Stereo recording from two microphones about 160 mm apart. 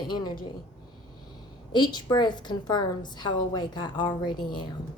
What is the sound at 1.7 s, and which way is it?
A woman's voice, 25° left (ahead or behind).